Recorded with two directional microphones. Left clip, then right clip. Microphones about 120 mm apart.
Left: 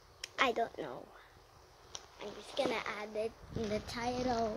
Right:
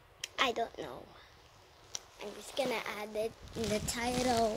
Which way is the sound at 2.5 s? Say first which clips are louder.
Even; 75° right (ahead or behind).